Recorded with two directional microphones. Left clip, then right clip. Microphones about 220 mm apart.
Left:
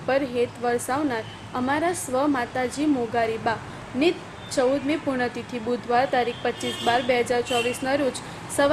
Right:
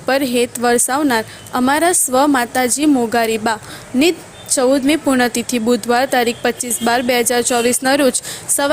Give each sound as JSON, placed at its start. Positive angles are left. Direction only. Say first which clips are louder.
{"t": 0.0, "sound": "a woman's voice", "louder": "right 7 dB", "side_deg": -50}